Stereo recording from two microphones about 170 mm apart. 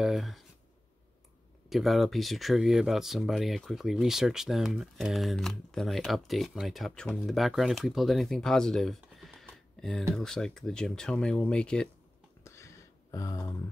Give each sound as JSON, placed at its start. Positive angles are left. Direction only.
{"t": 0.0, "sound": "speech", "side_deg": 0}
{"t": 1.7, "sound": "speech", "side_deg": 0}
{"t": 12.4, "sound": "a sound", "side_deg": 15}